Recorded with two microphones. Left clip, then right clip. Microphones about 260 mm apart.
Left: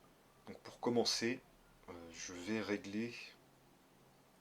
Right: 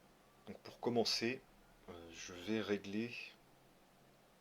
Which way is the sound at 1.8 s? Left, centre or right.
Right.